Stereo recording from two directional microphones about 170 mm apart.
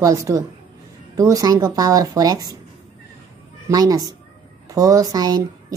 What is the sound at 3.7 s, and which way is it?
A woman's voice, 20° right (ahead or behind).